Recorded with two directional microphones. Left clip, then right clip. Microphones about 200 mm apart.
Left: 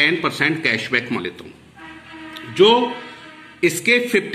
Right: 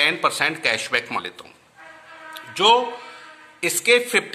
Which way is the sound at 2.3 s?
60° right (ahead or behind).